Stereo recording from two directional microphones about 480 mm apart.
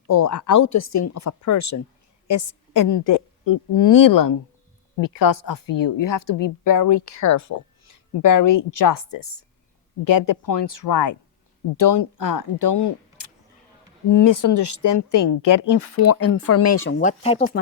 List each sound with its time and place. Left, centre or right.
0.1 s a woman's voice: left
5.6 s speech: left
6.0 s a woman's voice: left
12.1 s speech: left
14.3 s a woman's voice: left
17.0 s speech: centre